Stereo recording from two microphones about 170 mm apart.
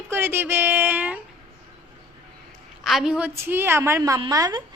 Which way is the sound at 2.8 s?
Centre (ahead or behind).